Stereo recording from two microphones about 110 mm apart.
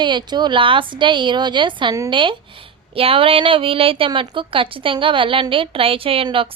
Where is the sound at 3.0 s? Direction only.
60° right (ahead or behind).